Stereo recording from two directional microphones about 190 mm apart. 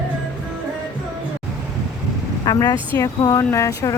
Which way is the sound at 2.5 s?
15° left (ahead or behind).